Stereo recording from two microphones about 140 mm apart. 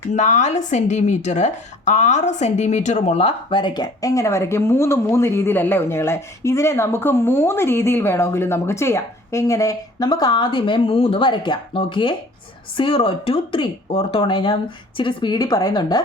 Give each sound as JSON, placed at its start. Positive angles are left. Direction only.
{"t": 0.1, "sound": "a woman's voice", "side_deg": 60}